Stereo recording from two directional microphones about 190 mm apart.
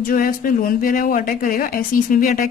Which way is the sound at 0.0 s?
50° left (ahead or behind).